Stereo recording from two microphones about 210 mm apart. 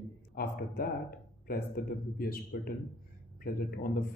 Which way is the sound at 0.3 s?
45° left (ahead or behind).